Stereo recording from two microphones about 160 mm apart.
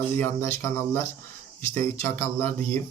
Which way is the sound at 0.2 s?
15° left (ahead or behind).